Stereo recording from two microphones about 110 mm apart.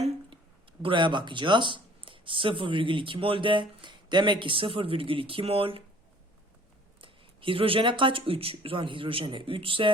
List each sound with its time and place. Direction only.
0.8 s speech: 50° right (ahead or behind)
7.0 s speech: 55° right (ahead or behind)